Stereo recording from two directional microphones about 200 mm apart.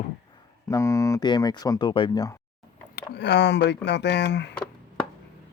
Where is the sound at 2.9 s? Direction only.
55° left (ahead or behind).